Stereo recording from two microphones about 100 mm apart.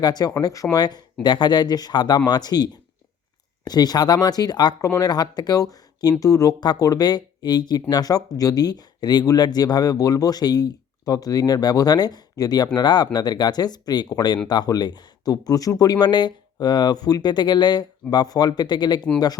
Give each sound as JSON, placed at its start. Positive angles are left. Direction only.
{"t": 0.0, "sound": "speech", "side_deg": 45}
{"t": 3.7, "sound": "speech", "side_deg": 40}